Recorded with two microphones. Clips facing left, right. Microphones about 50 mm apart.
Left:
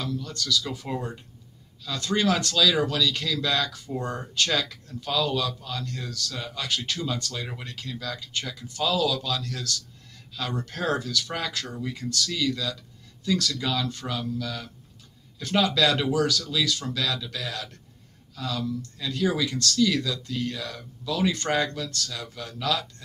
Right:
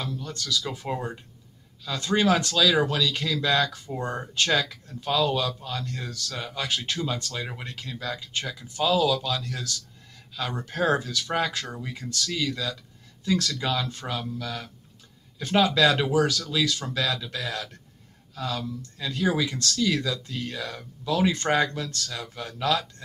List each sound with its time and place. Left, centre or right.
0.1 s speech: right